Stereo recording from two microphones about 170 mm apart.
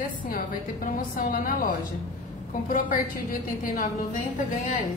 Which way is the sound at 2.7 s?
55° left (ahead or behind).